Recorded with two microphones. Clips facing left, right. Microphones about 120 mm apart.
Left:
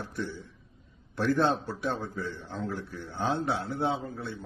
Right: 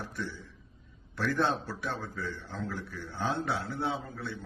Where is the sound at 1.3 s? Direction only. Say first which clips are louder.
Left 3 dB; 25° left (ahead or behind).